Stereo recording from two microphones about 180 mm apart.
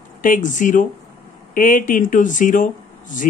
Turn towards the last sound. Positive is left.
turn(degrees=45)  # may be behind; listen again after turning